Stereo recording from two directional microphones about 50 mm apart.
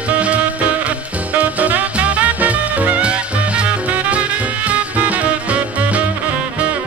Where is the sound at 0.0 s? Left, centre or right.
Right.